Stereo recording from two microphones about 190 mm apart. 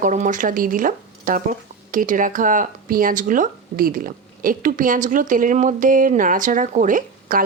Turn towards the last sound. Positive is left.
turn(degrees=-45)  # may be behind; listen again after turning